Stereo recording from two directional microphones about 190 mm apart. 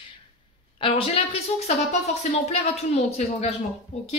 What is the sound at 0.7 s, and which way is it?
A woman's voice, 30° left (ahead or behind).